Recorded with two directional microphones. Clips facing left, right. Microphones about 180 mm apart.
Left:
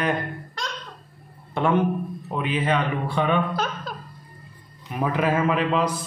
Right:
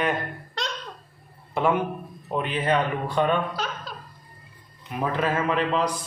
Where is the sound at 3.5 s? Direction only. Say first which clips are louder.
Left 4 dB; 50° left (ahead or behind).